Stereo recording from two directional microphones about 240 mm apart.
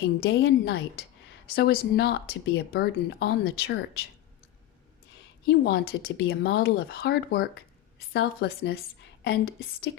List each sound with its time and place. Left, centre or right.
0.0 s a woman's voice: left
5.5 s speech: left